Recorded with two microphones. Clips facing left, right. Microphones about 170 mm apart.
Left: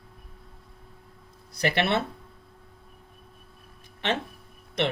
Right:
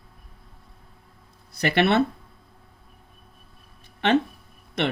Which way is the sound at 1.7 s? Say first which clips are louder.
Right 5 dB; 60° right (ahead or behind).